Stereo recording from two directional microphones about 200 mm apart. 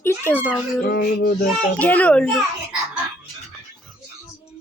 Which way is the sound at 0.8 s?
50° left (ahead or behind).